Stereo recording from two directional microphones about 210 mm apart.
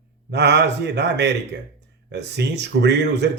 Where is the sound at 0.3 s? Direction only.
55° right (ahead or behind).